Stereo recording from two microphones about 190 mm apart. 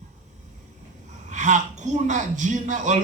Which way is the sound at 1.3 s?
40° right (ahead or behind).